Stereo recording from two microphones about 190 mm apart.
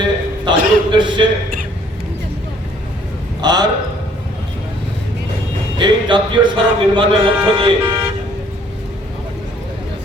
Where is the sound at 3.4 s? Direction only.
20° right (ahead or behind).